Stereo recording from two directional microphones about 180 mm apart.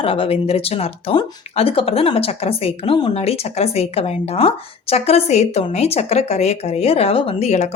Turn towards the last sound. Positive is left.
turn(degrees=40)  # may be behind; listen again after turning